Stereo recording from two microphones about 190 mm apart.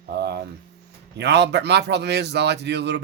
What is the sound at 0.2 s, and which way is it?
Hum, 60° right (ahead or behind).